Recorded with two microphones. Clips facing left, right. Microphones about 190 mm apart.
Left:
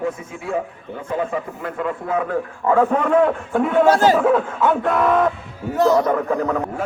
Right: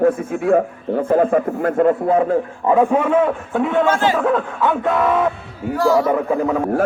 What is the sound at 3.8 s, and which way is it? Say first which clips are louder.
Speech: left 3 dB; 40° left (ahead or behind).